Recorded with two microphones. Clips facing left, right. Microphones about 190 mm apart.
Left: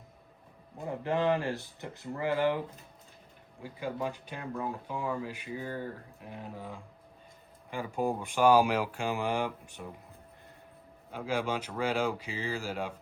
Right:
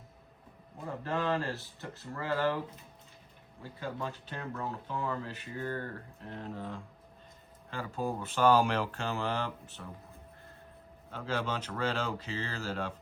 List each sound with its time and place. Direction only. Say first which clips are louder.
0.9 s speech: left 4 dB; 15° left (ahead or behind)
3.6 s speech: left 3 dB; 15° left (ahead or behind)
11.1 s speech: left 3 dB; 10° left (ahead or behind)